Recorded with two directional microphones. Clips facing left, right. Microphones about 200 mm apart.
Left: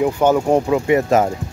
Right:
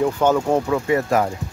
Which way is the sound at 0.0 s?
10° left (ahead or behind).